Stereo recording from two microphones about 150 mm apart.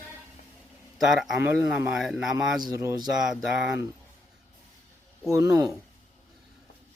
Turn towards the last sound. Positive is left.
turn(degrees=-20)  # may be behind; listen again after turning